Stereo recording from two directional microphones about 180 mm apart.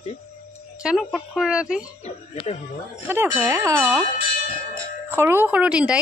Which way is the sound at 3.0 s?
10° right (ahead or behind).